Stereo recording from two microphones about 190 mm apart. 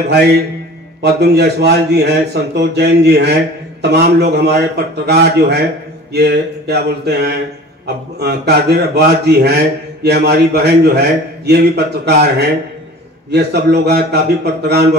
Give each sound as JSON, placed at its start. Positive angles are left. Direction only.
{"t": 1.0, "sound": "a man's voice", "side_deg": -60}